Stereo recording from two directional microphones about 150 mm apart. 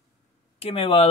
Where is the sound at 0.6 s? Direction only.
40° left (ahead or behind).